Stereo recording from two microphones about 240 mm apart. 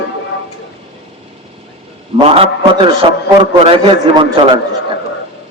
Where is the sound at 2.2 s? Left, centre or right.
Right.